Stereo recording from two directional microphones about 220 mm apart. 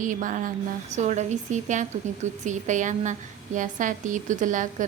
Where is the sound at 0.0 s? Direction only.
35° right (ahead or behind).